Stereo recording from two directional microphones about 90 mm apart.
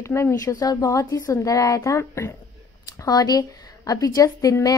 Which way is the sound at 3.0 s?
45° left (ahead or behind).